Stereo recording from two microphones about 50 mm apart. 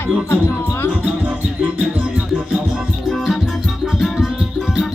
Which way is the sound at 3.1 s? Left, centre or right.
Centre.